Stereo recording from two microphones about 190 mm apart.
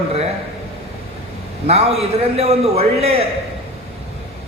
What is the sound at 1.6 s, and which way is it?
A man's voice, 35° right (ahead or behind).